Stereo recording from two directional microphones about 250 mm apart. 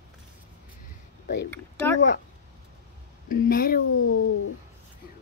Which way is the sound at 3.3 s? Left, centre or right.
Left.